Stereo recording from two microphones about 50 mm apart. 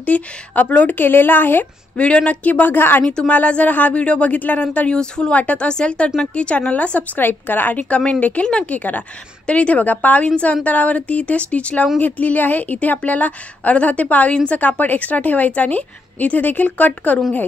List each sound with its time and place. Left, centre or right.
0.0 s a woman's voice: left
1.0 s speech: left
2.0 s a woman's voice: left
3.1 s a woman's voice: centre
3.3 s a woman's voice: left
4.8 s speech: centre
5.3 s a woman's voice: left
7.2 s a woman's voice: left
10.2 s a woman's voice: left